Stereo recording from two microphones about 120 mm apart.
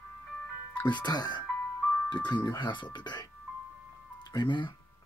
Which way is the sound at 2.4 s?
40° left (ahead or behind).